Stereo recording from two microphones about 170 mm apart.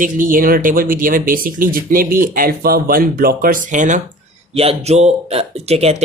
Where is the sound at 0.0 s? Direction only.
55° right (ahead or behind).